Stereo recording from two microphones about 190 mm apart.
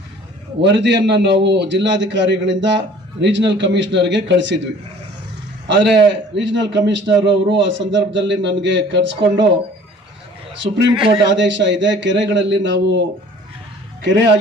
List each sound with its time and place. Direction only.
0.6 s a man's voice: 70° right (ahead or behind)
5.6 s a man's voice: 65° right (ahead or behind)
10.6 s a man's voice: 70° right (ahead or behind)
11.1 s a man's voice: 20° right (ahead or behind)
11.3 s a man's voice: 70° right (ahead or behind)